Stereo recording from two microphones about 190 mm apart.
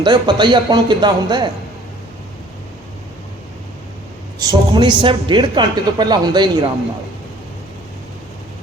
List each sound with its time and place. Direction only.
0.0 s a woman's voice: 25° right (ahead or behind)
4.4 s a woman's voice: 20° right (ahead or behind)